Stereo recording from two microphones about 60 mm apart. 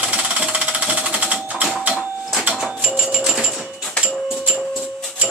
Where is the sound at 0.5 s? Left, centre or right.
Right.